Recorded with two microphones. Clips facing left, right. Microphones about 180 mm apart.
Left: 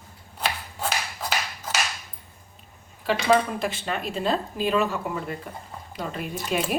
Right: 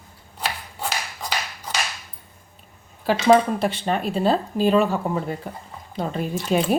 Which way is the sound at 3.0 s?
40° right (ahead or behind).